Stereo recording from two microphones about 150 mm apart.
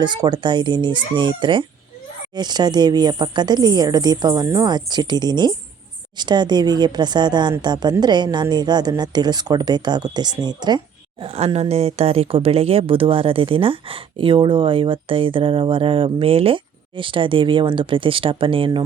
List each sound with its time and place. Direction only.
0.0 s a woman's voice: 30° right (ahead or behind)
11.2 s speech: 40° right (ahead or behind)